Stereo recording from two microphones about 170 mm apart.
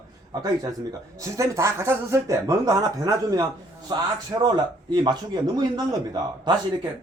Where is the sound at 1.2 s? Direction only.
15° right (ahead or behind).